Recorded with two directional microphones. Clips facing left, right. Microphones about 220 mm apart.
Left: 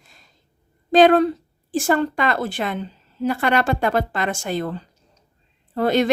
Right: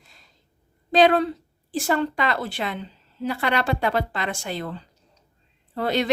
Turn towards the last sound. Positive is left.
turn(degrees=45)  # may be behind; listen again after turning